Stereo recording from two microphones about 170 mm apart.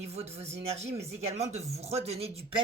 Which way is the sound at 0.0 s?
35° right (ahead or behind).